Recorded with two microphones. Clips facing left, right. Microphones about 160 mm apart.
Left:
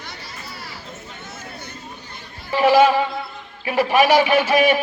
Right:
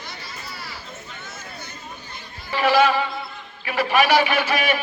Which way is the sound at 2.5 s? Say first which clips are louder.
Left 4 dB; 25° left (ahead or behind).